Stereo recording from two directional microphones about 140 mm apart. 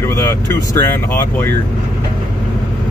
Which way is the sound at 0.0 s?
20° left (ahead or behind).